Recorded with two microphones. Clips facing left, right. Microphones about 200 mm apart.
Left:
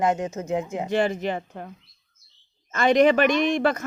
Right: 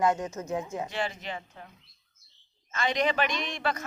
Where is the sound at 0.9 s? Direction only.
50° left (ahead or behind).